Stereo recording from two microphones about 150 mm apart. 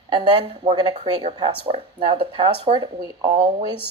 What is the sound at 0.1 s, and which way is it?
Speech, 35° right (ahead or behind).